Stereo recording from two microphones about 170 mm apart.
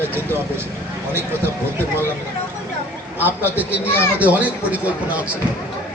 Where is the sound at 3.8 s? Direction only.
15° left (ahead or behind).